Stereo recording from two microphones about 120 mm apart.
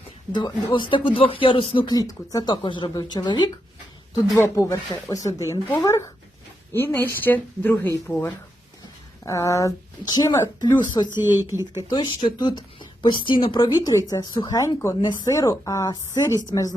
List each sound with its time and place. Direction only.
0.3 s speech: 40° left (ahead or behind)
4.4 s a woman's voice: 25° left (ahead or behind)
6.7 s speech: 15° left (ahead or behind)
9.2 s a woman's voice: 25° left (ahead or behind)
11.3 s speech: 20° right (ahead or behind)
11.8 s speech: 40° left (ahead or behind)
13.9 s a woman's voice: 30° left (ahead or behind)